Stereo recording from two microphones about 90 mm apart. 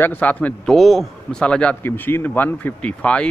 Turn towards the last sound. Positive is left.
turn(degrees=15)  # may be behind; listen again after turning